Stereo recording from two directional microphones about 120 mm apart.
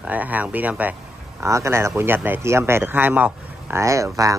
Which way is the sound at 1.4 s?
25° right (ahead or behind).